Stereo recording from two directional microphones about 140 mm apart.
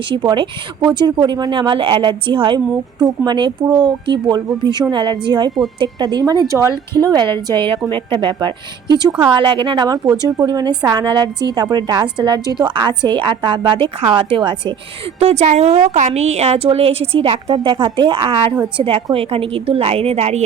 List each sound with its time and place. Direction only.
0.1 s a woman's voice: 35° right (ahead or behind)
15.2 s a woman's voice: 50° right (ahead or behind)